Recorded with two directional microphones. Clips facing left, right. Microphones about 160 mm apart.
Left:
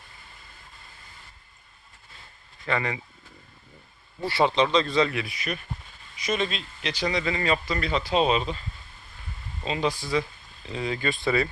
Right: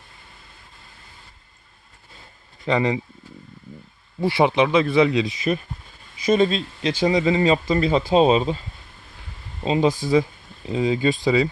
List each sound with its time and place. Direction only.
2.6 s speech: 20° right (ahead or behind)
4.2 s speech: 15° right (ahead or behind)
6.2 s speech: 30° right (ahead or behind)
9.6 s speech: 25° right (ahead or behind)